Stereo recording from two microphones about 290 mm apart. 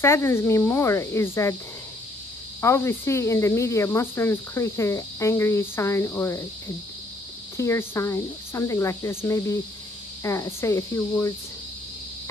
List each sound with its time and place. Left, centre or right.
0.0 s cricket: centre
2.6 s cricket: centre
7.5 s cricket: centre